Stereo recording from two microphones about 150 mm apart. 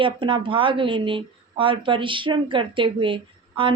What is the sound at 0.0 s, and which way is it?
Speech, 35° right (ahead or behind).